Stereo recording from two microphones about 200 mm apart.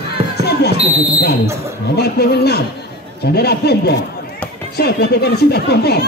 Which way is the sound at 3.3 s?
55° left (ahead or behind).